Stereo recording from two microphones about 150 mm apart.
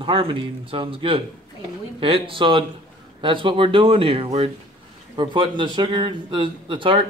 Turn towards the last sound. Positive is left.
turn(degrees=-35)  # may be behind; listen again after turning